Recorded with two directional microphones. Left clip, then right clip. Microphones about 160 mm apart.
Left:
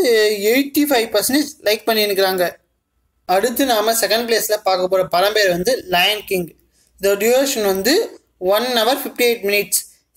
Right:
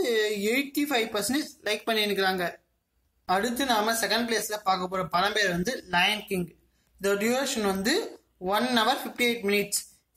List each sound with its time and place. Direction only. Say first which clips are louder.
0.0 s speech: left 11 dB; 35° left (ahead or behind)